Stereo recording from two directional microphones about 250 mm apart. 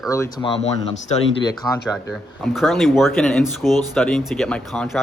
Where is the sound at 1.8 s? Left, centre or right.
Centre.